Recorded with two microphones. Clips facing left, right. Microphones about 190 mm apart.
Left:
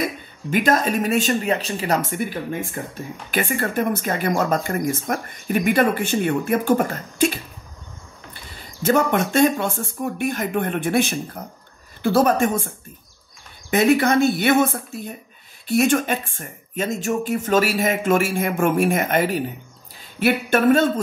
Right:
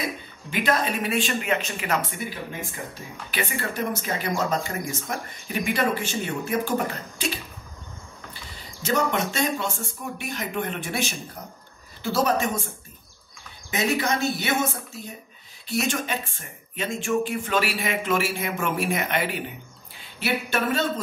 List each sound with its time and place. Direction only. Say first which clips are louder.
0.5 s speech: left 5 dB; 45° left (ahead or behind)
3.3 s speech: left 6 dB; 50° left (ahead or behind)
8.8 s speech: left 6 dB; 50° left (ahead or behind)
13.7 s speech: left 8 dB; 55° left (ahead or behind)